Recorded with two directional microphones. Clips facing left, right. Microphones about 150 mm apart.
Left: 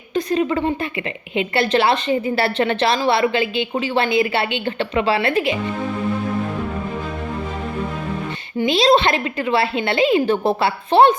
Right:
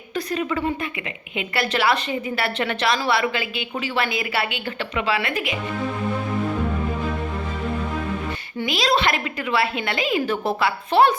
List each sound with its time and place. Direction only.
0.1 s a woman's voice: 25° left (ahead or behind)
8.6 s a woman's voice: 25° left (ahead or behind)